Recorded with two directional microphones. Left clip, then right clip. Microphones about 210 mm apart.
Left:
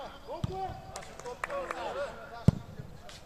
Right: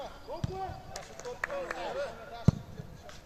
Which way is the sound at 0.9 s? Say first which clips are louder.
Even; 10° right (ahead or behind).